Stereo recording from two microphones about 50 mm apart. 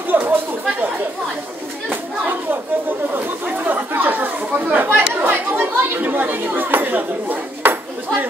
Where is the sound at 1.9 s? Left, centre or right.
Right.